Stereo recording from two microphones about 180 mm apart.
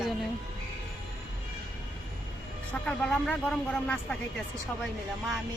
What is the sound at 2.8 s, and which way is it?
Speech, 5° left (ahead or behind).